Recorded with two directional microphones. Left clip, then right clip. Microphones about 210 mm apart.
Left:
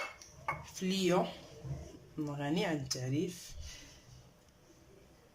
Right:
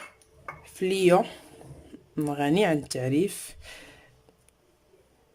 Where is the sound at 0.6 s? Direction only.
45° right (ahead or behind).